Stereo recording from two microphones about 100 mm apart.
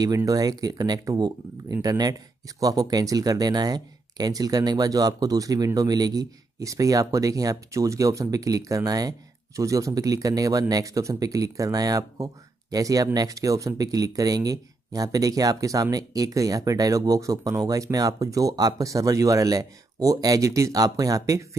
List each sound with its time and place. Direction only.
0.0 s speech: 35° right (ahead or behind)